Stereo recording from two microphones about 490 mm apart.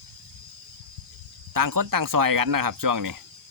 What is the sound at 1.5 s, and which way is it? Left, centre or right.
Speech, right.